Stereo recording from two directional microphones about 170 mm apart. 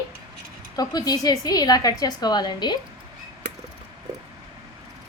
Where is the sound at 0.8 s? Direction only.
25° left (ahead or behind).